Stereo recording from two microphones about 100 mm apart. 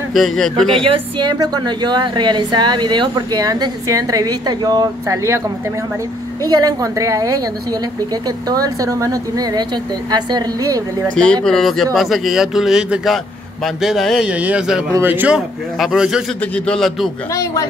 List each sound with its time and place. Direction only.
0.1 s speech: 5° left (ahead or behind)
0.8 s a woman's voice: 60° right (ahead or behind)
1.4 s speech: 45° right (ahead or behind)
6.4 s a woman's voice: 40° right (ahead or behind)
8.5 s a woman's voice: 35° right (ahead or behind)
11.4 s speech: 5° left (ahead or behind)
14.2 s speech: 15° right (ahead or behind)
16.5 s speech: 10° left (ahead or behind)
17.3 s speech: 30° left (ahead or behind)